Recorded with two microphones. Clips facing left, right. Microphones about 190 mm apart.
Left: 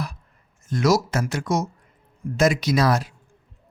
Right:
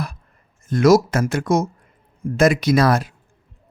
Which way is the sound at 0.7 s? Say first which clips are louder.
Right 6 dB; 55° right (ahead or behind).